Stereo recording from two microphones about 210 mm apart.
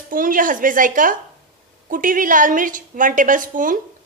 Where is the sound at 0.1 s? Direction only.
40° right (ahead or behind).